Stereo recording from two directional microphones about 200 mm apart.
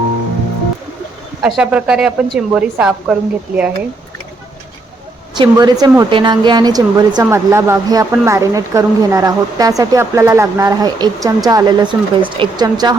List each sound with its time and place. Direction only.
1.4 s a woman's voice: 5° right (ahead or behind)
5.4 s a woman's voice: 20° right (ahead or behind)